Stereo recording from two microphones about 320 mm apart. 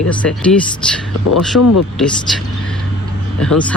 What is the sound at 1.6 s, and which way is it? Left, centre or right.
Speech, left.